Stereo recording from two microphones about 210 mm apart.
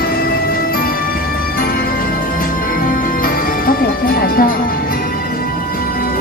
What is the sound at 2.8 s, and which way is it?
Music, 45° left (ahead or behind).